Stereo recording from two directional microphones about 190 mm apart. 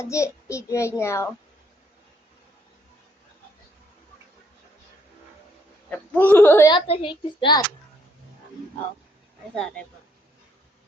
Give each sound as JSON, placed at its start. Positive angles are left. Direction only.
{"t": 0.0, "sound": "a child's voice", "side_deg": 15}
{"t": 5.9, "sound": "a child's voice", "side_deg": 10}
{"t": 6.7, "sound": "a child's voice", "side_deg": 30}